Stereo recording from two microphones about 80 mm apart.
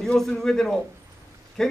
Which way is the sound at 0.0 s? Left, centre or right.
Centre.